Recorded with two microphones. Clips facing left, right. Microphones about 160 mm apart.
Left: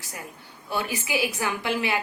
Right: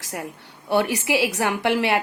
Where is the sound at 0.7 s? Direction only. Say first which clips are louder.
Right 7 dB; 70° right (ahead or behind).